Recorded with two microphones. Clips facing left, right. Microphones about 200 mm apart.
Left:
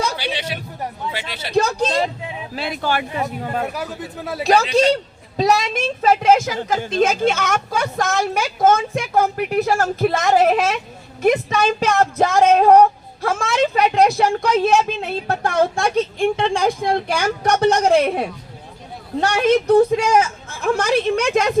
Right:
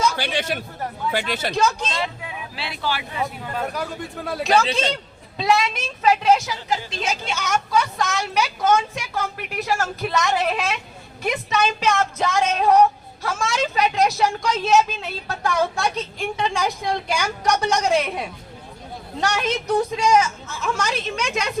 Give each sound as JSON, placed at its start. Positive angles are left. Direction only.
{"t": 0.2, "sound": "speech", "side_deg": -50}
{"t": 1.5, "sound": "speech", "side_deg": 35}
{"t": 2.2, "sound": "a sound", "side_deg": 25}
{"t": 2.6, "sound": "speech", "side_deg": 45}
{"t": 3.7, "sound": "a man's voice", "side_deg": 5}
{"t": 5.4, "sound": "speech", "side_deg": 40}